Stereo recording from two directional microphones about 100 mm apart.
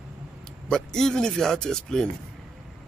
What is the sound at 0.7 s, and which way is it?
Speech, 5° left (ahead or behind).